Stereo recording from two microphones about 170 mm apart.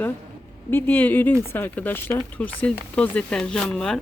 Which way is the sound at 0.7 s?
10° left (ahead or behind).